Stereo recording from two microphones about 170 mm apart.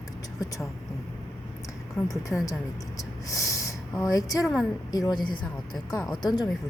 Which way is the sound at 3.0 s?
20° left (ahead or behind).